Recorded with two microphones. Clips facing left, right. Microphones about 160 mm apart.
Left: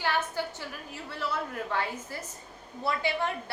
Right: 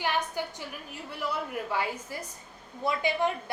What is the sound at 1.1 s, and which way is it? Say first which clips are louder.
A woman's voice: right 1 dB; 15° right (ahead or behind).